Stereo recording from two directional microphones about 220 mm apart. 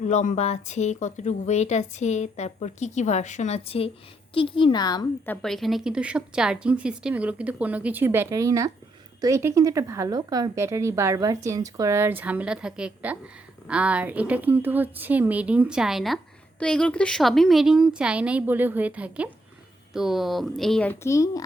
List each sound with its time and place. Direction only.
0.0 s a woman's voice: 30° left (ahead or behind); by 21.4 s 15° left (ahead or behind)